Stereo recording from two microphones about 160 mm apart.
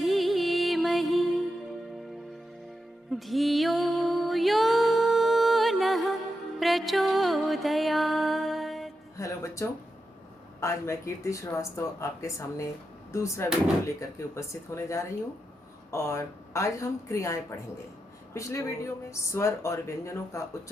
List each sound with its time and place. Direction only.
0.0 s music: centre (ahead or behind)
3.1 s music: centre (ahead or behind)
9.1 s music: 20° left (ahead or behind)
10.6 s speech: 20° left (ahead or behind)